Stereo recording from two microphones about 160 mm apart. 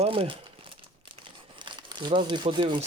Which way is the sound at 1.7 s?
30° right (ahead or behind).